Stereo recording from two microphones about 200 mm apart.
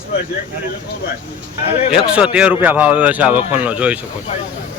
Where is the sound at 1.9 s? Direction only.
5° right (ahead or behind).